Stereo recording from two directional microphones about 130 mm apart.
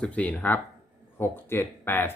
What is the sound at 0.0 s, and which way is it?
Speech, 10° left (ahead or behind).